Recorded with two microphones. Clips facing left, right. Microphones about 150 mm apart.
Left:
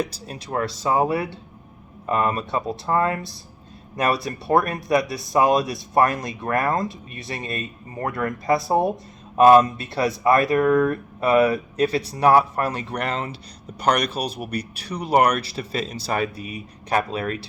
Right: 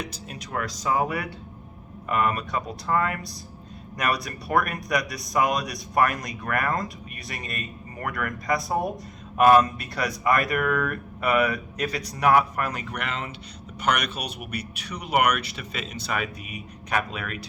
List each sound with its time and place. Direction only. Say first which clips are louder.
0.0 s speech: left 7 dB; 30° left (ahead or behind)